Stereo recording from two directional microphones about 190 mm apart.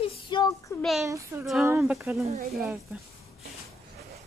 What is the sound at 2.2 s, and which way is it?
Speech, 35° right (ahead or behind).